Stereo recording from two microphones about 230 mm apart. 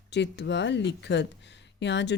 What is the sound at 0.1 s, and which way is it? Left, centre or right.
Speech, left.